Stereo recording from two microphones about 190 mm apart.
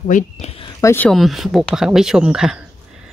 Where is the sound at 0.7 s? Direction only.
10° left (ahead or behind).